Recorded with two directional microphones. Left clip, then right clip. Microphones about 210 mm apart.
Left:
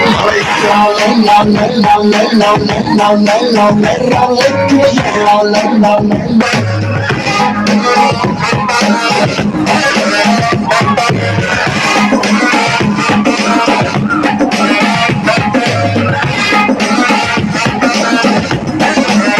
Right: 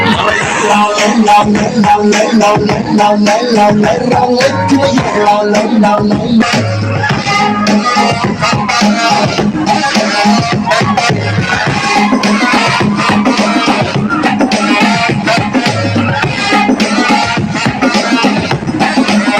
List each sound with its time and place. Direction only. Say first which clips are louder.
0.8 s music: left 1 dB; 45° left (ahead or behind)
2.0 s music: even; 20° left (ahead or behind)
2.9 s music: even; 5° left (ahead or behind)
8.8 s music: right 1 dB; 55° left (ahead or behind)